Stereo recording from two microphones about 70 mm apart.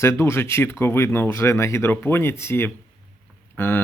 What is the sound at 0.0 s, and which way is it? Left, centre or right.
Speech, left.